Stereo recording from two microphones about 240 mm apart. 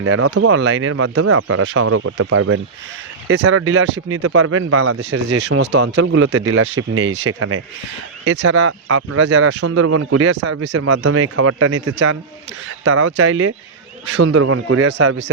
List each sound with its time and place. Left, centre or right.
0.0 s speech: right
3.2 s speech: right
4.9 s speech: right
8.2 s speech: right
11.0 s speech: right